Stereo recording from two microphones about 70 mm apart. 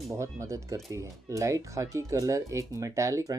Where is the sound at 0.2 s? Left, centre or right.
Right.